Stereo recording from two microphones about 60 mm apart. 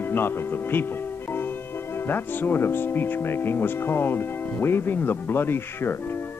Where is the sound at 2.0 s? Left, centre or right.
Left.